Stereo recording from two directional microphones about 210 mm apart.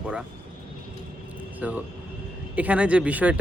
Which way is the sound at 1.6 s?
5° right (ahead or behind).